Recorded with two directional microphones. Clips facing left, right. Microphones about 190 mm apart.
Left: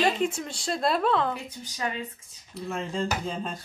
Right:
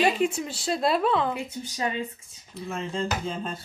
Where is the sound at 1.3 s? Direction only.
20° right (ahead or behind).